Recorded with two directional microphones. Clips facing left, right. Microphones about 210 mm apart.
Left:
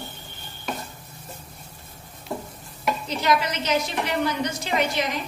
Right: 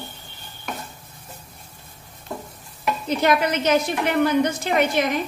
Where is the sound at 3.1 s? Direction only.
55° right (ahead or behind).